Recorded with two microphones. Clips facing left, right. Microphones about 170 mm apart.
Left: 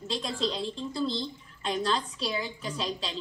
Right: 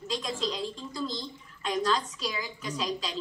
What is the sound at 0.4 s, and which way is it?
A woman's voice, 35° left (ahead or behind).